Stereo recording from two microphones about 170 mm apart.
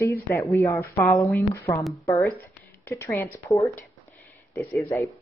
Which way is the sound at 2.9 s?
15° left (ahead or behind).